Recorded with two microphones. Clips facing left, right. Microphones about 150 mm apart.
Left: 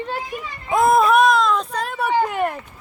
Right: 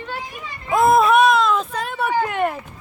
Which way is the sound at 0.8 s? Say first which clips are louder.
Right 1 dB; centre (ahead or behind).